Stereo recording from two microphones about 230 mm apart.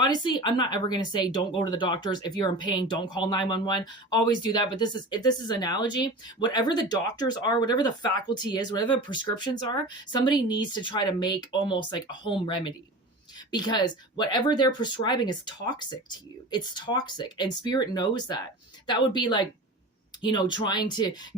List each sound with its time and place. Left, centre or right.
0.0 s speech: centre